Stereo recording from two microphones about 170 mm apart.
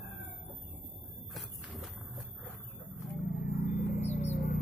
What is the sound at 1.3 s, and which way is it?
Squeal, centre (ahead or behind).